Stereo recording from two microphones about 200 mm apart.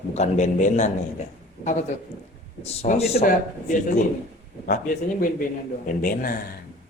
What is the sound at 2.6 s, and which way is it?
Speech, 30° left (ahead or behind).